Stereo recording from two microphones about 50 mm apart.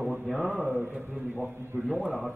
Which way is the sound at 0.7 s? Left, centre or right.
Right.